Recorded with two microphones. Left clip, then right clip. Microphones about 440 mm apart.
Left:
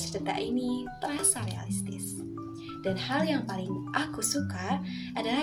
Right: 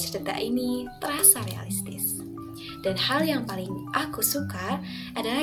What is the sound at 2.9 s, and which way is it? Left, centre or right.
A woman's voice, right.